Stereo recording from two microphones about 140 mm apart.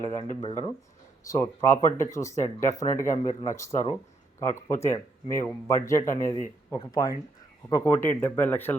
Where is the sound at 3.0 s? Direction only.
60° left (ahead or behind).